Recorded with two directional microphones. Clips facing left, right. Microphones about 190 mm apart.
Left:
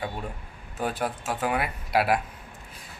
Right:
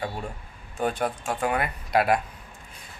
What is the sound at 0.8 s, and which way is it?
A man's voice, 5° left (ahead or behind).